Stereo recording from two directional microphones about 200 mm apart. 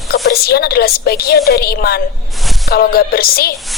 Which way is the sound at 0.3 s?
50° left (ahead or behind).